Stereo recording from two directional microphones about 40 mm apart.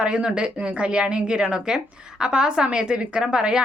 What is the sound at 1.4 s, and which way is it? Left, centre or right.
Speech, centre.